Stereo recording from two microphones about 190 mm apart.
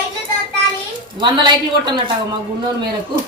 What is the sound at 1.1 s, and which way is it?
Speech, 25° right (ahead or behind).